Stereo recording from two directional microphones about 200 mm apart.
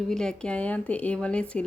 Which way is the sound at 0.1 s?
5° left (ahead or behind).